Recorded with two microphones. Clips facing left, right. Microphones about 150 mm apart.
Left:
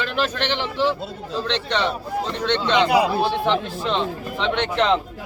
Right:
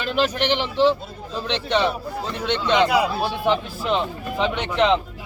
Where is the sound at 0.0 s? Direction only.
15° right (ahead or behind).